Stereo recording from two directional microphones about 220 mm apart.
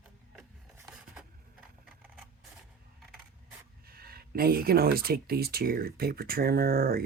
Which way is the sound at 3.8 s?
45° right (ahead or behind).